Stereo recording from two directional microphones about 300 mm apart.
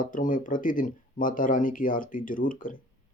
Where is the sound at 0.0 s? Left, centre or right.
Left.